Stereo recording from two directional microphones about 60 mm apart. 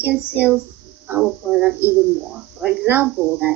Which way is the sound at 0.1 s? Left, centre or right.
Right.